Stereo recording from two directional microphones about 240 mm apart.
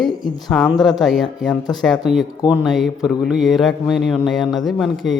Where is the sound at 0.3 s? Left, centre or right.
Centre.